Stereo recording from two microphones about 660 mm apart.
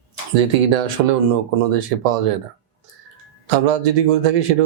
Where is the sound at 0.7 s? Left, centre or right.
Right.